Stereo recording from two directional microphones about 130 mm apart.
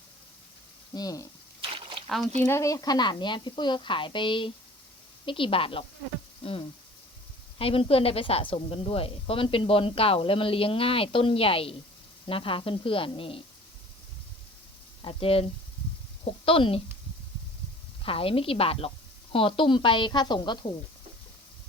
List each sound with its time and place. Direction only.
0.9 s speech: 30° left (ahead or behind)
1.6 s a sound: 45° right (ahead or behind)
2.0 s speech: centre (ahead or behind)
2.4 s a woman's voice: 20° left (ahead or behind); by 6.6 s 45° left (ahead or behind)
7.6 s a woman's voice: 45° left (ahead or behind)
15.0 s a woman's voice: 45° left (ahead or behind)
18.0 s a woman's voice: 45° left (ahead or behind)